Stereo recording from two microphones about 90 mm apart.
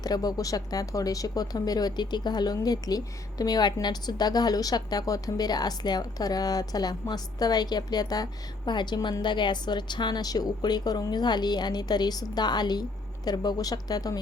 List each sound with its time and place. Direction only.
0.0 s speech: 45° left (ahead or behind)